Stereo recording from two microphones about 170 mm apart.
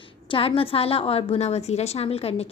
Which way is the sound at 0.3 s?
35° left (ahead or behind).